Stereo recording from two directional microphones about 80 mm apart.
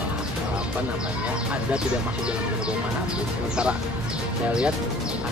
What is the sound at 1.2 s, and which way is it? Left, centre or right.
Speech, centre.